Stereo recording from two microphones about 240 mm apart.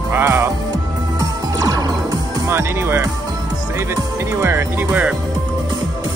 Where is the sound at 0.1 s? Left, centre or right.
Centre.